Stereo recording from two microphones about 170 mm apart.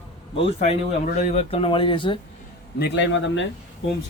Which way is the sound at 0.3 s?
40° left (ahead or behind).